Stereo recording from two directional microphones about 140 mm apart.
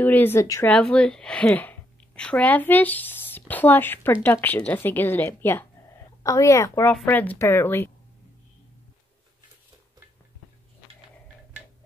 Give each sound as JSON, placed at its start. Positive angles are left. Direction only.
{"t": 0.0, "sound": "speech", "side_deg": 15}
{"t": 0.7, "sound": "a woman's voice", "side_deg": 10}